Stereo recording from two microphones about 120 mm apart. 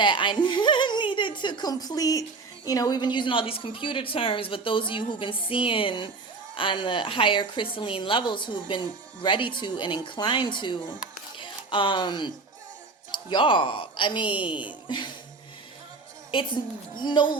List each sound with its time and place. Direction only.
0.0 s a woman's voice: 40° left (ahead or behind)
14.8 s music: 40° left (ahead or behind)
16.9 s a woman's voice: 40° left (ahead or behind)